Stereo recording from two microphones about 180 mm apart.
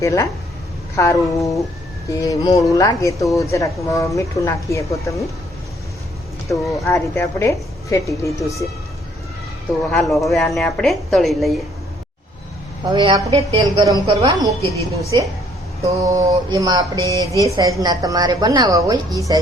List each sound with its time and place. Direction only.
0.0 s a woman's voice: 15° left (ahead or behind)
6.5 s a woman's voice: 15° left (ahead or behind)
9.9 s a woman's voice: centre (ahead or behind)
12.9 s a woman's voice: 25° right (ahead or behind)
15.8 s a woman's voice: 20° right (ahead or behind)